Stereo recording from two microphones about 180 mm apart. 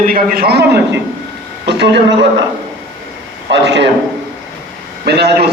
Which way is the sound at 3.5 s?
75° right (ahead or behind).